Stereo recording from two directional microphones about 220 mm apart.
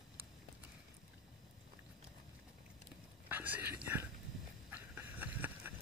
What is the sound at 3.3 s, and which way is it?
Whispering, 10° right (ahead or behind).